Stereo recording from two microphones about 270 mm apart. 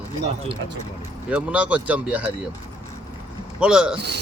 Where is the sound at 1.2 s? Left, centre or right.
Centre.